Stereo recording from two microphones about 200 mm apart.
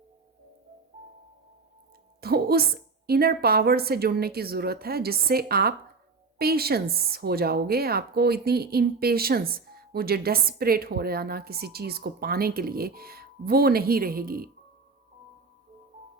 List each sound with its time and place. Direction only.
2.2 s music: 50° right (ahead or behind)
3.1 s a woman's voice: 50° right (ahead or behind)